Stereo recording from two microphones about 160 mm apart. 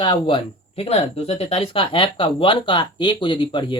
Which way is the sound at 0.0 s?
30° left (ahead or behind).